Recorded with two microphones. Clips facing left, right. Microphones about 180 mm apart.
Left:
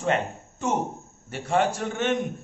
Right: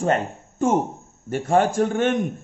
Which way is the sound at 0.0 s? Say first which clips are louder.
Right 3 dB; 45° right (ahead or behind).